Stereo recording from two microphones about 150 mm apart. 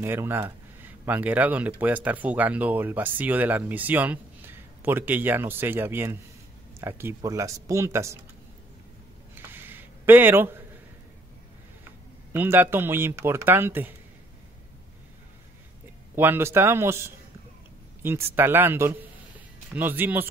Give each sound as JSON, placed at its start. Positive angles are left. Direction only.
{"t": 0.0, "sound": "speech", "side_deg": -15}
{"t": 9.5, "sound": "a sound", "side_deg": -15}
{"t": 12.3, "sound": "speech", "side_deg": -15}
{"t": 16.2, "sound": "speech", "side_deg": -15}